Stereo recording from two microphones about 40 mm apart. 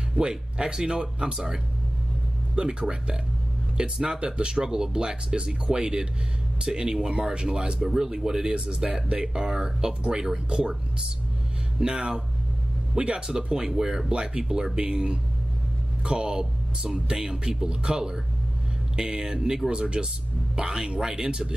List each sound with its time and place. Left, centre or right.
0.3 s speech: centre
8.5 s speech: right
11.8 s speech: right